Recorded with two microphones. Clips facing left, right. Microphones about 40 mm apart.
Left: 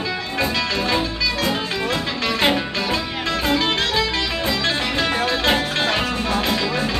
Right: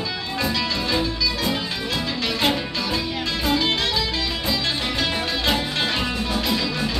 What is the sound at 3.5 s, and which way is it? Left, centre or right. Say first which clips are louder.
Music: left 1 dB; left.